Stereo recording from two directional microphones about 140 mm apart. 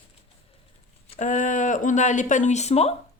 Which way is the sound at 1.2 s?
60° left (ahead or behind).